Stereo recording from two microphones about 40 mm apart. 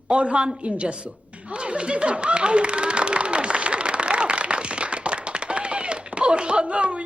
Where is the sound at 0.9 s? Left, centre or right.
Right.